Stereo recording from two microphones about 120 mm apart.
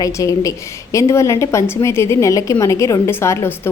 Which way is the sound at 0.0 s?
25° left (ahead or behind).